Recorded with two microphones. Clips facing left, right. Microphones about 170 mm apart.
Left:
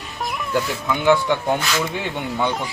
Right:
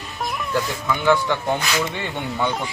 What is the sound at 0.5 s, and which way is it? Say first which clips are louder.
Speech: left 2 dB; 15° left (ahead or behind).